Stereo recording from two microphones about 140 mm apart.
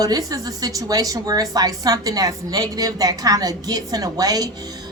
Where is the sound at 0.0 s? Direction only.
25° right (ahead or behind).